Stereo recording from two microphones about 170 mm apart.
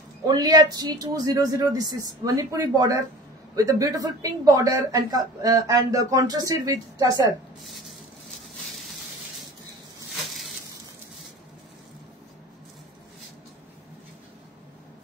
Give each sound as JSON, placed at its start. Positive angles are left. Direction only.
{"t": 0.3, "sound": "a man's voice", "side_deg": -25}